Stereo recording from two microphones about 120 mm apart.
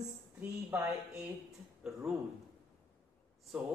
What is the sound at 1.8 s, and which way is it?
Speech, 5° right (ahead or behind).